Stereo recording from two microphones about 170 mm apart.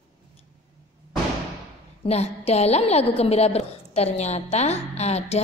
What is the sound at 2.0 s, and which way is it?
A woman's voice, 40° left (ahead or behind).